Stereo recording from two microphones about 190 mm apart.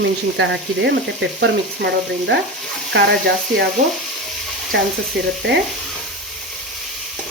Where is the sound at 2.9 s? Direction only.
60° right (ahead or behind).